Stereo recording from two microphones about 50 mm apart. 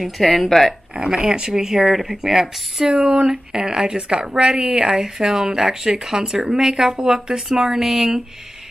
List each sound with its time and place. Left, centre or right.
0.0 s speech: centre
0.9 s a woman's voice: centre
2.9 s a woman's voice: right